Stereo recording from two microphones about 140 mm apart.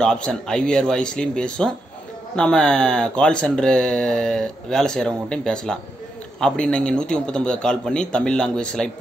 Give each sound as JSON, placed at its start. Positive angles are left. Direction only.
{"t": 0.0, "sound": "a man's voice", "side_deg": 5}